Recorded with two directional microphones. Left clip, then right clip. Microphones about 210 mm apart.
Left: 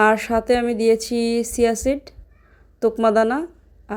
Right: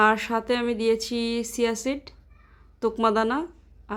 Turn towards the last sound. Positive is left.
turn(degrees=10)  # may be behind; listen again after turning